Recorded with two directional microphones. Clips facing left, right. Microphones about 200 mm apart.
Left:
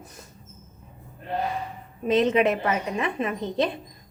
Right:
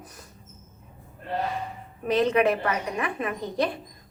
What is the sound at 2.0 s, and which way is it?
A woman's voice, 20° left (ahead or behind).